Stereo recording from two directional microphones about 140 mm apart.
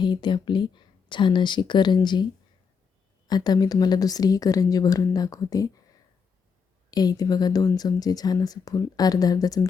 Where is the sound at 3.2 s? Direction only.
30° left (ahead or behind).